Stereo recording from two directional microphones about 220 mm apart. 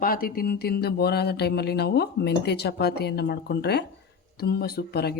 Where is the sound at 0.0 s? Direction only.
40° left (ahead or behind).